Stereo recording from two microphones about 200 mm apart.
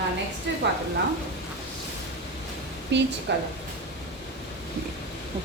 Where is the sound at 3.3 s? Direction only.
60° right (ahead or behind).